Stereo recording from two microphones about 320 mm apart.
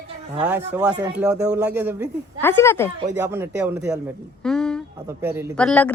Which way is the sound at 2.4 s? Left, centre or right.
Centre.